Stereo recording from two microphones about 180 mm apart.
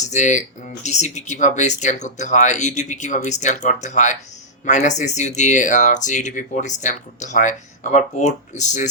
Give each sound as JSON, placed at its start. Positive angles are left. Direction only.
{"t": 0.0, "sound": "speech", "side_deg": 40}